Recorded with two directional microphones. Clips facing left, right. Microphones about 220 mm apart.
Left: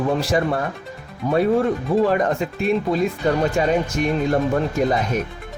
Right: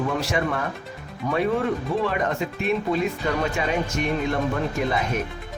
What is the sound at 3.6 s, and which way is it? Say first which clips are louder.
Speech: left 6 dB; 40° left (ahead or behind).